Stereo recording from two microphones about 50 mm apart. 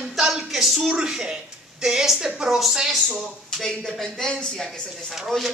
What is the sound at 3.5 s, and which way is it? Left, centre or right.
A woman's voice, centre.